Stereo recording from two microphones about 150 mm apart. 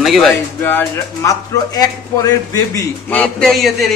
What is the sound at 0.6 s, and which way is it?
Speech, 15° left (ahead or behind).